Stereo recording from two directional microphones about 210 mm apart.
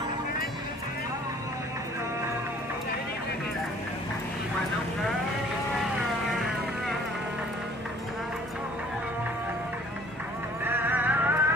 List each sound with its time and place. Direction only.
10.6 s music: 10° right (ahead or behind)